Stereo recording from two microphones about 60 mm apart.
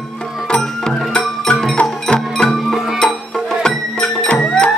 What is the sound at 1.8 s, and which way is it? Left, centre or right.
Music, centre.